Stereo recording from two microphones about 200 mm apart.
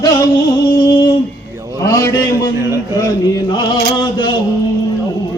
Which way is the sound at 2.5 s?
15° right (ahead or behind).